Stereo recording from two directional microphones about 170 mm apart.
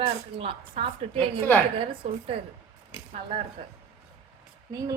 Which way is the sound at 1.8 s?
35° right (ahead or behind).